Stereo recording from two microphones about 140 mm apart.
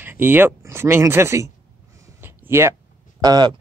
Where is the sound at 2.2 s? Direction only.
20° right (ahead or behind).